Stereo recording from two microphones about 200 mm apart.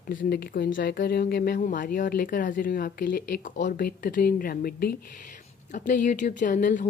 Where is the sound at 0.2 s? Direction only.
50° left (ahead or behind).